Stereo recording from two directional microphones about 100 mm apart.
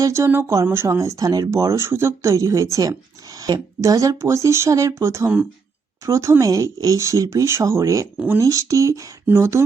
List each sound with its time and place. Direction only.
0.0 s speech: 30° right (ahead or behind)